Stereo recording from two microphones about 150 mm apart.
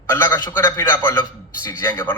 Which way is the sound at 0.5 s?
15° left (ahead or behind).